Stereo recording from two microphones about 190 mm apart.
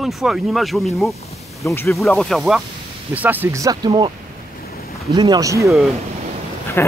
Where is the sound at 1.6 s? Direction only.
15° left (ahead or behind).